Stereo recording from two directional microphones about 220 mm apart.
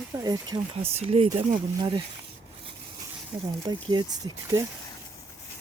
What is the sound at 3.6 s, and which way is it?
Speech, 20° right (ahead or behind).